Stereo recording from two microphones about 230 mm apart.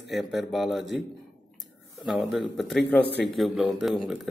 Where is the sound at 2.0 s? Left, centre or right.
Centre.